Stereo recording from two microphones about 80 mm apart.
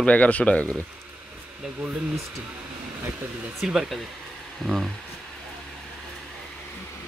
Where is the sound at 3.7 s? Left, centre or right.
Centre.